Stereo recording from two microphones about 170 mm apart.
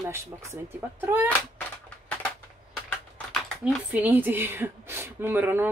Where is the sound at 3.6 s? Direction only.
5° right (ahead or behind).